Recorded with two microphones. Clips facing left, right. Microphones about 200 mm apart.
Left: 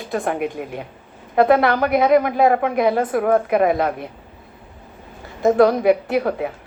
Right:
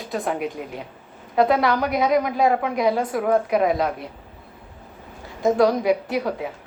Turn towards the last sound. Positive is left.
turn(degrees=55)  # may be behind; listen again after turning